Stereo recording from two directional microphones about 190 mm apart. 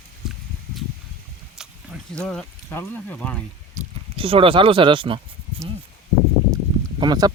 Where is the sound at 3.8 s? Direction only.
30° right (ahead or behind).